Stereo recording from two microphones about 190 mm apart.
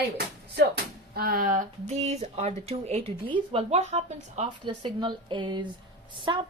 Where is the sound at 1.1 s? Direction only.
50° right (ahead or behind).